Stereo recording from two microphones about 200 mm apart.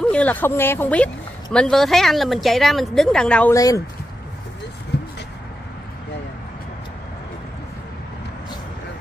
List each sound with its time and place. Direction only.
0.0 s speech: 5° left (ahead or behind)
3.5 s speech: 15° left (ahead or behind)